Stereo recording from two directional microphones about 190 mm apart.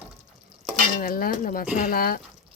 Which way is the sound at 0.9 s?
50° left (ahead or behind).